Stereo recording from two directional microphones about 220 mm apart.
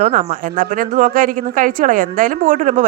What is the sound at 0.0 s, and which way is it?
Speech, 35° right (ahead or behind).